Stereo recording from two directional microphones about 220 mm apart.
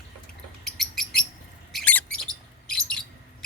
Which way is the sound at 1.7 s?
5° left (ahead or behind).